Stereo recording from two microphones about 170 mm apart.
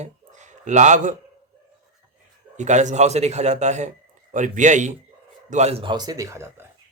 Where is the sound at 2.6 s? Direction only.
45° right (ahead or behind).